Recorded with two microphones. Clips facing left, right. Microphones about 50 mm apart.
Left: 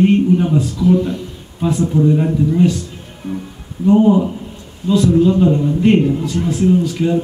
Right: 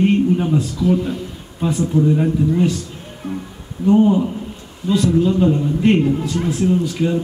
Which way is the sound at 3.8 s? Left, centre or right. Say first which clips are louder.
Left 2 dB; centre.